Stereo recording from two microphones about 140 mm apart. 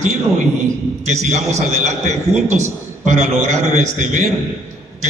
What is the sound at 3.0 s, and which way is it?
A man's voice, 55° right (ahead or behind).